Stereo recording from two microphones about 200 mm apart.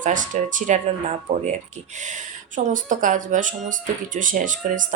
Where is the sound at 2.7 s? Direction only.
40° right (ahead or behind).